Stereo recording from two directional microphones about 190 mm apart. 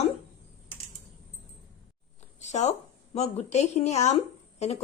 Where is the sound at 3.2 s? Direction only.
35° left (ahead or behind).